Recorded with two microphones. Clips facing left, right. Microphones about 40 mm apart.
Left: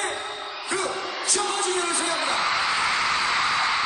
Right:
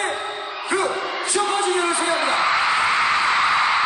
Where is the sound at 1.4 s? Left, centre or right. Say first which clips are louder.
Right 6 dB; right.